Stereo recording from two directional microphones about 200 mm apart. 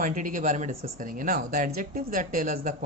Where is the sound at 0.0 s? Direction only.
40° right (ahead or behind).